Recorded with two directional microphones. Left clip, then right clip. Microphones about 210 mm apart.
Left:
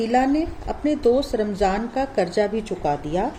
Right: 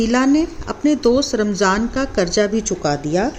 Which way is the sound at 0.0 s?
45° right (ahead or behind).